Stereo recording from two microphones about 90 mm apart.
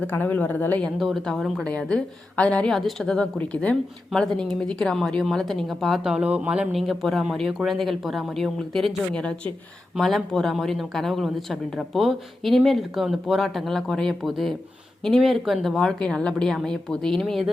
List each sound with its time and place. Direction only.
0.1 s a woman's voice: 20° left (ahead or behind)
0.9 s speech: centre (ahead or behind)
1.6 s a woman's voice: 10° left (ahead or behind)
2.7 s speech: 5° left (ahead or behind)
3.3 s a woman's voice: 15° left (ahead or behind); by 6.7 s 15° right (ahead or behind)
6.7 s speech: centre (ahead or behind)